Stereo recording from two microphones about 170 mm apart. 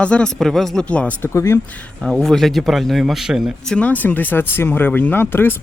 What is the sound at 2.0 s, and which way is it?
A man's voice, 5° left (ahead or behind).